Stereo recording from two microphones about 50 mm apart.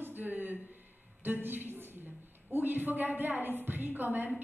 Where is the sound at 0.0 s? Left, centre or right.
Right.